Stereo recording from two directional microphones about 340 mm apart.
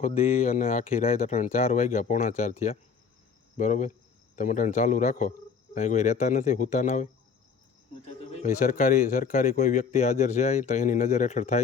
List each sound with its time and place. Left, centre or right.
0.0 s a man's voice: left
8.2 s a man's voice: centre